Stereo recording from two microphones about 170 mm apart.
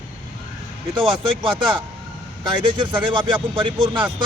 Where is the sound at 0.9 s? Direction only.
30° right (ahead or behind).